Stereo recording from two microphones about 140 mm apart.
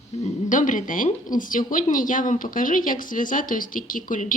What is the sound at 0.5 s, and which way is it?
Speech, 65° left (ahead or behind).